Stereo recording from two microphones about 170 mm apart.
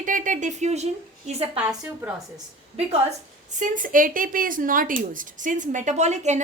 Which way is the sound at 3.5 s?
45° right (ahead or behind).